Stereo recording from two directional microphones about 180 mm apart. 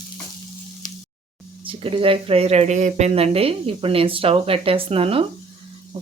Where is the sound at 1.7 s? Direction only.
30° right (ahead or behind).